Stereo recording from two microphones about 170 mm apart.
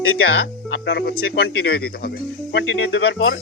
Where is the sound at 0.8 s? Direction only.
80° left.